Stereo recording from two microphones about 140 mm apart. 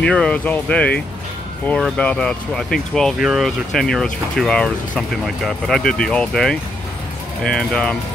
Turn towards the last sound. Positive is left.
turn(degrees=5)  # may be behind; listen again after turning